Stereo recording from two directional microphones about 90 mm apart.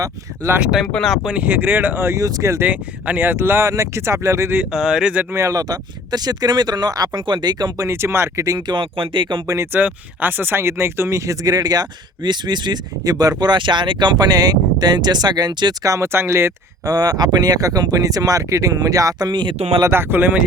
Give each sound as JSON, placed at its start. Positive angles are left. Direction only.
{"t": 0.4, "sound": "speech", "side_deg": -35}
{"t": 1.0, "sound": "speech", "side_deg": 0}
{"t": 1.3, "sound": "speech", "side_deg": -20}
{"t": 2.6, "sound": "speech", "side_deg": -20}
{"t": 4.7, "sound": "speech", "side_deg": -5}
{"t": 5.3, "sound": "speech", "side_deg": -35}
{"t": 7.2, "sound": "speech", "side_deg": -60}
{"t": 7.8, "sound": "speech", "side_deg": -30}
{"t": 8.4, "sound": "speech", "side_deg": -50}
{"t": 9.7, "sound": "speech", "side_deg": -20}
{"t": 13.4, "sound": "speech", "side_deg": -60}
{"t": 15.9, "sound": "speech", "side_deg": -30}
{"t": 16.8, "sound": "speech", "side_deg": -45}
{"t": 19.9, "sound": "speech", "side_deg": -25}